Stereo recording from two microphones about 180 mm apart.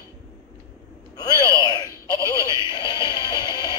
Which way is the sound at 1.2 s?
20° left (ahead or behind).